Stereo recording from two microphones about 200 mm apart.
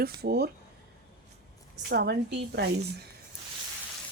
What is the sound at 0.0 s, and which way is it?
Speech, 50° right (ahead or behind).